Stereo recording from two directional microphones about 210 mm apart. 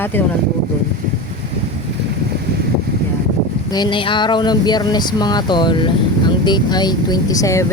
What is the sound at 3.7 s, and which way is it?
Speech, 20° left (ahead or behind).